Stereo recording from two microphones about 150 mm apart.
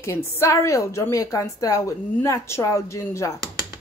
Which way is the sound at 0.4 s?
20° left (ahead or behind).